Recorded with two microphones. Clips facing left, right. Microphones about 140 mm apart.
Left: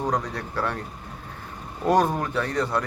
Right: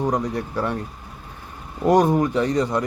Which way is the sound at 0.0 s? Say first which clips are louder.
Right 4 dB; 10° right (ahead or behind).